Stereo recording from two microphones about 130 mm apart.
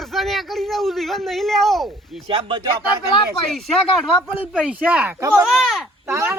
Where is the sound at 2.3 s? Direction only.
40° right (ahead or behind).